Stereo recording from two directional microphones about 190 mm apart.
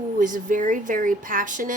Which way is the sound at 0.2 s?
45° right (ahead or behind).